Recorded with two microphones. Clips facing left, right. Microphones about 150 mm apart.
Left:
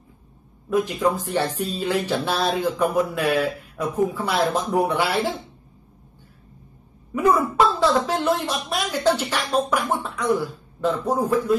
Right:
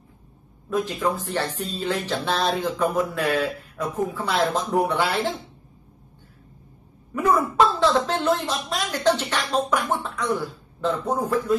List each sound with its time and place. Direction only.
0.7 s speech: 15° left (ahead or behind)
7.2 s a woman's voice: 10° left (ahead or behind)